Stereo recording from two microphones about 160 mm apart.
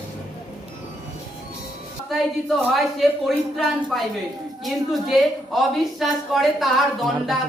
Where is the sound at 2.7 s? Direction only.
Centre (ahead or behind).